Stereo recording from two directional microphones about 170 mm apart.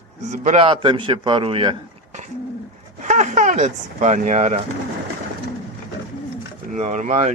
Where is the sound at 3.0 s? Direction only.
45° right (ahead or behind).